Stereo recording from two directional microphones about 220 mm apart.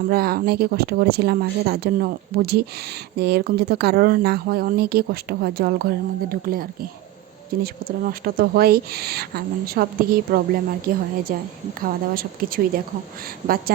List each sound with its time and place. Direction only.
0.1 s speech: 45° right (ahead or behind)